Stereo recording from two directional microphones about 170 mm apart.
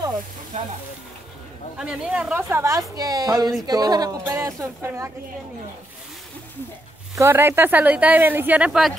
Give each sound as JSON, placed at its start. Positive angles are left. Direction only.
{"t": 0.5, "sound": "frying", "side_deg": -45}
{"t": 1.8, "sound": "a woman's voice", "side_deg": -5}
{"t": 7.2, "sound": "speech", "side_deg": -15}